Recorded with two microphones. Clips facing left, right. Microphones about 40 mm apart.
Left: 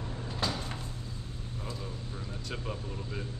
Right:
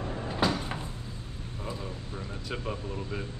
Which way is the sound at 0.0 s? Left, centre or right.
Right.